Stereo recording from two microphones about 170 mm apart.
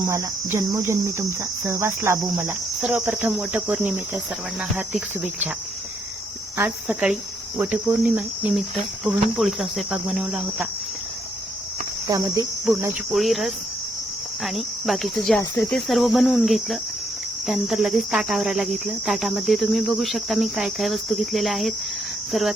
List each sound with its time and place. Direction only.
0.1 s cricket: 15° right (ahead or behind)
2.1 s cricket: centre (ahead or behind)
6.6 s cricket: 10° right (ahead or behind)
12.0 s speech: 20° right (ahead or behind)
13.1 s cricket: centre (ahead or behind)
22.3 s speech: centre (ahead or behind)